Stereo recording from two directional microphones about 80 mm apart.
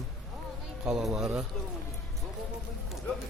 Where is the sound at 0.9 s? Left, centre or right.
Centre.